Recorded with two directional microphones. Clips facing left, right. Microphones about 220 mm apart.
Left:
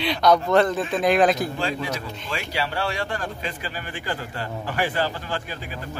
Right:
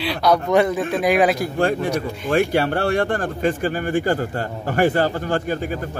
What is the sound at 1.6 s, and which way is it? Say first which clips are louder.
Speech: right 8 dB; 55° right (ahead or behind).